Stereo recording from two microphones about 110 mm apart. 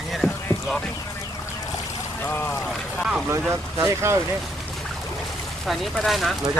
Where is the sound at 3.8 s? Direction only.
25° right (ahead or behind).